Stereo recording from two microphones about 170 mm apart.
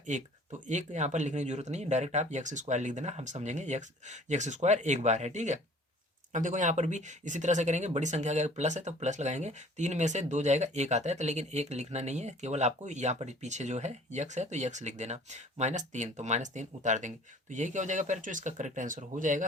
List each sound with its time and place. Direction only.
0.1 s speech: 45° right (ahead or behind)